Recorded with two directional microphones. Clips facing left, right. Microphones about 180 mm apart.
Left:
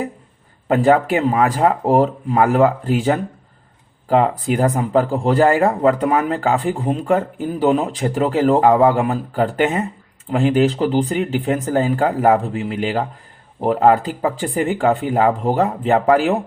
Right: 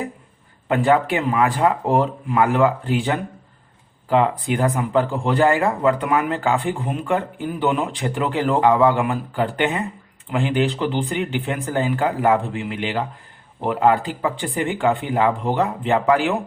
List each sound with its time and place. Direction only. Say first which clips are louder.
0.7 s speech: left 3 dB; 40° left (ahead or behind)